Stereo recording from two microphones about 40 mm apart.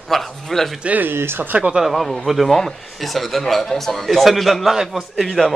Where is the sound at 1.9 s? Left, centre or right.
Centre.